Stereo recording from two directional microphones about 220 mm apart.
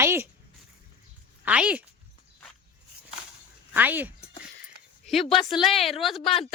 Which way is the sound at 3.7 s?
10° right (ahead or behind).